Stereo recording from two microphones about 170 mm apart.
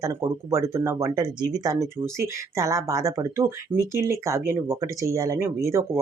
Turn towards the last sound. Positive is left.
turn(degrees=-15)  # may be behind; listen again after turning